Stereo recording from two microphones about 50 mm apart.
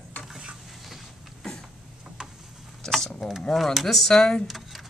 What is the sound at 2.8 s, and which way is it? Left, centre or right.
Speech, centre.